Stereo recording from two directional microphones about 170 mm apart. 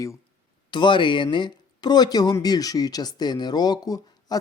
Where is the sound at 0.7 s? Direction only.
25° left (ahead or behind).